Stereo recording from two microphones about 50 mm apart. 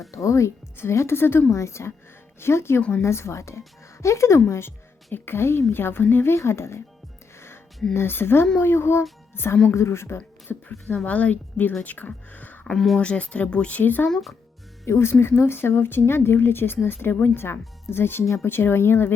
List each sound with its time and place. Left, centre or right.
0.1 s a woman's voice: left
0.8 s a woman's voice: left
5.1 s a woman's voice: left
7.3 s music: left
7.9 s a woman's voice: left
10.5 s a woman's voice: left
12.7 s speech: centre
13.0 s a woman's voice: left
14.1 s speech: centre
14.8 s speech: left
15.1 s a woman's voice: left